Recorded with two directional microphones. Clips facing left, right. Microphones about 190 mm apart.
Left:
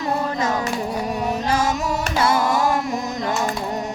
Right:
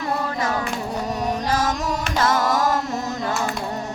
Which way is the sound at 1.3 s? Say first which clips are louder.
Left 1 dB; 10° left (ahead or behind).